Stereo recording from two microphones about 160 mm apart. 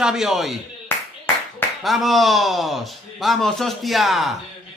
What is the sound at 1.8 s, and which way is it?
Speech, centre (ahead or behind).